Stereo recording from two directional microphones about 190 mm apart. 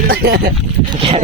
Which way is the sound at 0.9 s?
30° right (ahead or behind).